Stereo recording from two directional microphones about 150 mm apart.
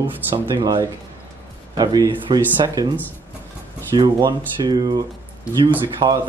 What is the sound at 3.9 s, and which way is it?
Speech, 30° right (ahead or behind).